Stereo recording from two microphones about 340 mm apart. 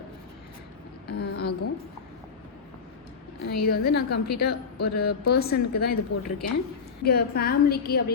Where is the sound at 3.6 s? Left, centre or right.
Left.